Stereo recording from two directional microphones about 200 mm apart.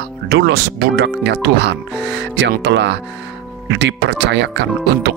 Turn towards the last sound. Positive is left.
turn(degrees=-60)  # may be behind; listen again after turning